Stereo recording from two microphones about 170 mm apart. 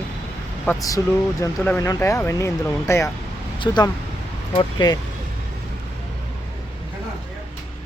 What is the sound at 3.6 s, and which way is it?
Speech, 25° left (ahead or behind).